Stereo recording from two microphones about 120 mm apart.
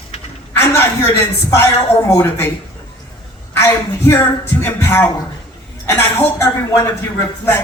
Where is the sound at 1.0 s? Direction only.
20° left (ahead or behind).